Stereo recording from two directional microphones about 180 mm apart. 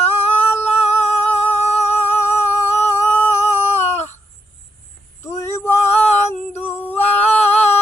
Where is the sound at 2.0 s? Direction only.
10° left (ahead or behind).